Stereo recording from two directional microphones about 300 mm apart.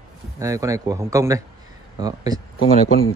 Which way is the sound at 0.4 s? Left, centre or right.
Centre.